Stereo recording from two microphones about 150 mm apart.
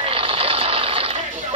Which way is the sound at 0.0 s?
40° right (ahead or behind).